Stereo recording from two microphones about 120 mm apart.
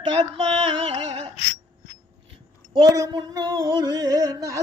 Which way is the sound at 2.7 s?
35° right (ahead or behind).